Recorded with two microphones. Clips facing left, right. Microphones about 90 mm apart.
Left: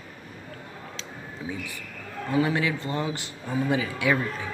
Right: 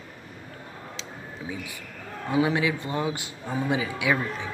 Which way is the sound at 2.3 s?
15° right (ahead or behind).